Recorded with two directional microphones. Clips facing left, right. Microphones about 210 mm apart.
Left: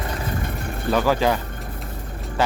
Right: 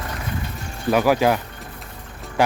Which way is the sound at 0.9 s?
10° right (ahead or behind).